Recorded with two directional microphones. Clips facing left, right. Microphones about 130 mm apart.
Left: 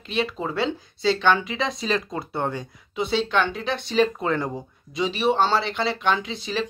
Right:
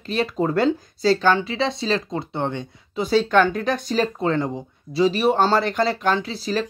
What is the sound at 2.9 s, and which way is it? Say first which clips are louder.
Speech: right 5 dB; 40° right (ahead or behind).